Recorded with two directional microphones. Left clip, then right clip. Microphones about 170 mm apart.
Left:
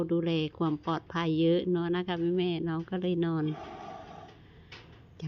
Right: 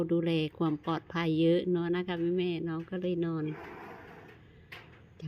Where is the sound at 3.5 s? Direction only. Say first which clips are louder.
Left 2 dB; 35° left (ahead or behind).